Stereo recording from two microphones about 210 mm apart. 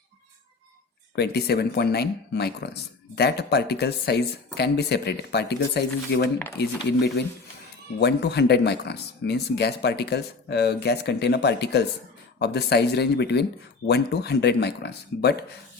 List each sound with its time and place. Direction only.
1.1 s speech: 50° left (ahead or behind)
7.9 s speech: 55° left (ahead or behind)